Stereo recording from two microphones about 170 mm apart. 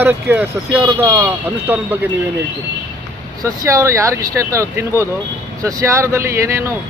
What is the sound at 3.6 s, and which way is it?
Speech, 15° right (ahead or behind).